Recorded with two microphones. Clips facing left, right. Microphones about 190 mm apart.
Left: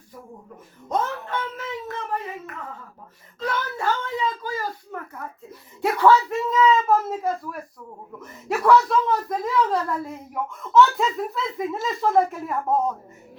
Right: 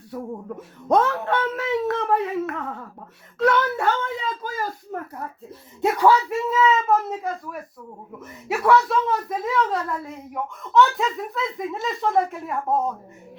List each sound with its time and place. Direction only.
0.1 s speech: 70° right (ahead or behind)
4.4 s a child's voice: 45° right (ahead or behind)
5.8 s speech: 15° right (ahead or behind)